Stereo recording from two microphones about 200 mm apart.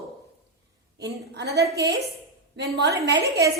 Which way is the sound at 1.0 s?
55° right (ahead or behind).